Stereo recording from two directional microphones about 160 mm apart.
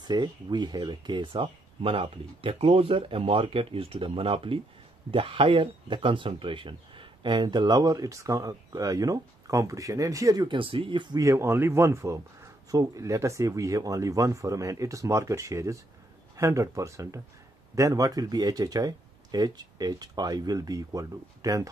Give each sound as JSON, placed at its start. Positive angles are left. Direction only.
{"t": 0.0, "sound": "speech", "side_deg": -25}